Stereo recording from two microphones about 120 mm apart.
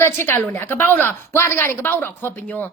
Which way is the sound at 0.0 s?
20° left (ahead or behind).